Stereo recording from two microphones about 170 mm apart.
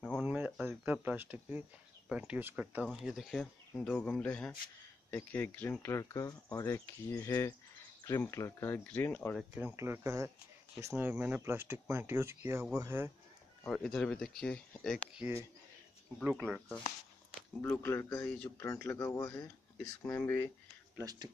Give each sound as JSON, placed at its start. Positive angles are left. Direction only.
{"t": 0.2, "sound": "a sound", "side_deg": -10}
{"t": 2.0, "sound": "speech", "side_deg": -5}
{"t": 9.4, "sound": "speech", "side_deg": -10}
{"t": 13.7, "sound": "speech", "side_deg": 5}
{"t": 17.6, "sound": "speech", "side_deg": 10}
{"t": 21.0, "sound": "speech", "side_deg": -20}